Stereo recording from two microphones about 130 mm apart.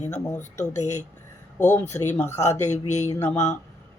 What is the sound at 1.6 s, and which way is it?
Speech, 20° left (ahead or behind).